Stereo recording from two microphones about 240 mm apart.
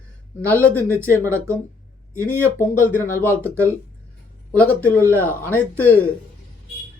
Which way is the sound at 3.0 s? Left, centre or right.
Centre.